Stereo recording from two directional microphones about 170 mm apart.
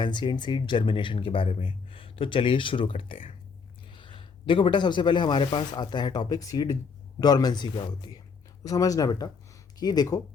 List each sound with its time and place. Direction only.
0.0 s speech: 25° left (ahead or behind)